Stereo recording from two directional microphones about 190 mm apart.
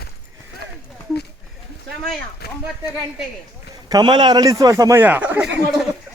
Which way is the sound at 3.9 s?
20° right (ahead or behind).